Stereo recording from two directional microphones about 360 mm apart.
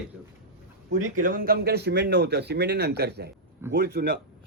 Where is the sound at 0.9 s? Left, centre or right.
Right.